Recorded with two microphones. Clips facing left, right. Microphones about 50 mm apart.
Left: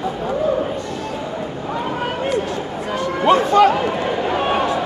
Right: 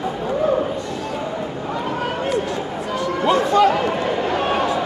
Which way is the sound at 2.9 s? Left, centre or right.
Left.